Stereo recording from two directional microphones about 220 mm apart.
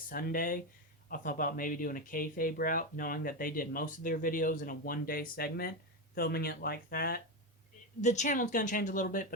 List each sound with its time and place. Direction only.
0.1 s speech: 40° left (ahead or behind)
8.0 s speech: 30° left (ahead or behind)